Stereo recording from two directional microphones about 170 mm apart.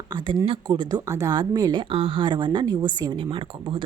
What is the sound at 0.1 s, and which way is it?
A woman's voice, 25° right (ahead or behind).